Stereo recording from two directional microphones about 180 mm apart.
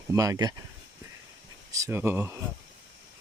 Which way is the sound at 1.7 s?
15° right (ahead or behind).